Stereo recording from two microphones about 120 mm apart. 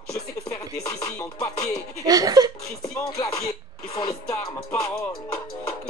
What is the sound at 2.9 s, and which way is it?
Music, 25° left (ahead or behind).